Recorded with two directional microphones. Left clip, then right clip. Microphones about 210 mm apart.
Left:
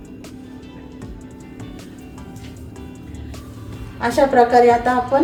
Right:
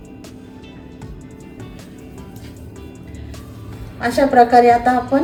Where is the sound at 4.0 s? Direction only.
15° left (ahead or behind).